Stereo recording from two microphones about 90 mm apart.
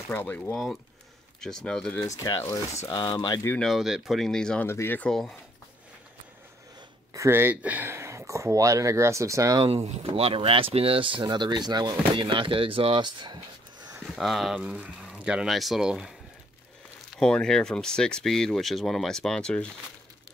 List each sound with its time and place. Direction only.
0.1 s speech: 20° left (ahead or behind)
1.4 s speech: 5° left (ahead or behind)
2.0 s speech: 40° left (ahead or behind)
3.5 s speech: centre (ahead or behind)
4.6 s speech: 25° left (ahead or behind)
7.2 s speech: 25° right (ahead or behind)
9.6 s speech: 90° right; by 11.2 s 75° right (ahead or behind)
11.2 s speech: 55° right (ahead or behind)
14.1 s speech: centre (ahead or behind)
17.2 s speech: 10° left (ahead or behind)